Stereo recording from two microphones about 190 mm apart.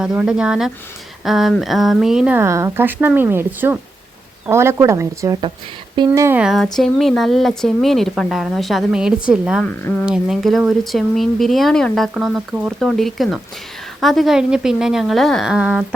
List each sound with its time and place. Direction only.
0.0 s speech: 5° right (ahead or behind)
9.6 s speech: 5° left (ahead or behind)